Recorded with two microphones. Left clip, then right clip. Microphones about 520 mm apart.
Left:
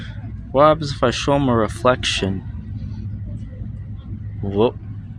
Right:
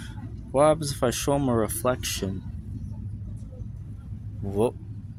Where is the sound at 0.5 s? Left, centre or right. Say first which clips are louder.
Left 7 dB; right.